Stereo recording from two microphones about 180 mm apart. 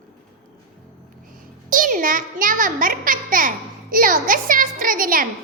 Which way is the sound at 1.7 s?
50° right (ahead or behind).